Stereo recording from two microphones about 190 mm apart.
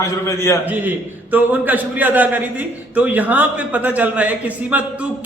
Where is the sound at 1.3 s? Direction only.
10° right (ahead or behind).